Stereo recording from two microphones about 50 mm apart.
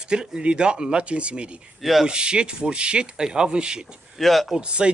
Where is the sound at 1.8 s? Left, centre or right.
Centre.